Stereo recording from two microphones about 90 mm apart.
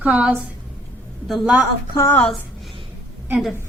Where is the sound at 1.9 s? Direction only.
30° left (ahead or behind).